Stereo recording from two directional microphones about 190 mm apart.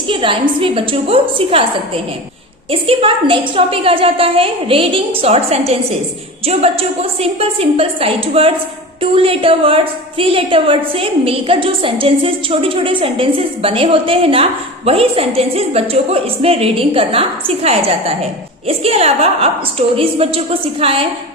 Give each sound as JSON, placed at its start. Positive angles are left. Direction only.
{"t": 0.1, "sound": "a woman's voice", "side_deg": -25}
{"t": 2.6, "sound": "a woman's voice", "side_deg": -30}